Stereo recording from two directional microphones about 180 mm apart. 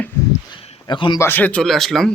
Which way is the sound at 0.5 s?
30° left (ahead or behind).